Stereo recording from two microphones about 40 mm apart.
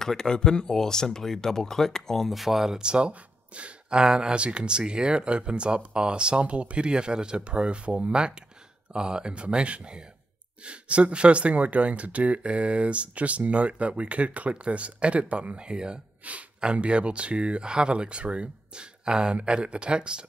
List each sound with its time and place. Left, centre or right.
0.0 s speech: centre
2.2 s speech: centre
2.8 s speech: right
15.5 s speech: right
16.2 s speech: right
16.6 s speech: right